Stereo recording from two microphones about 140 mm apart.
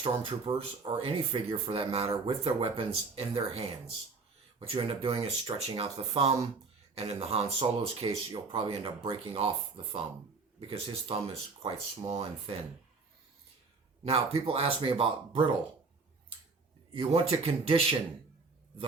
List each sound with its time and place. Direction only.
0.0 s speech: 40° right (ahead or behind)
4.6 s speech: 45° right (ahead or behind)
14.0 s speech: 45° right (ahead or behind)
16.9 s speech: 40° right (ahead or behind)